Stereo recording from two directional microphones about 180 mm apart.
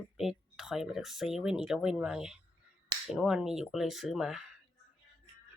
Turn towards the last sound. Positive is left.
turn(degrees=0)  # may be behind; listen again after turning